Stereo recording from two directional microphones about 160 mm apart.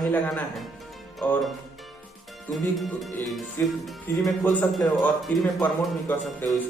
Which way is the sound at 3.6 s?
15° left (ahead or behind).